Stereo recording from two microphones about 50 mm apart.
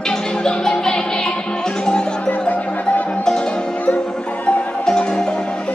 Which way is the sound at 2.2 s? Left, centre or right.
Left.